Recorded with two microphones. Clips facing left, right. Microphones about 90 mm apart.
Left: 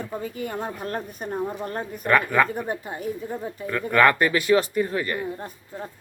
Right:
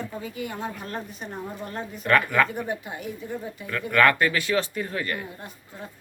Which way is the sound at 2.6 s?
35° left (ahead or behind).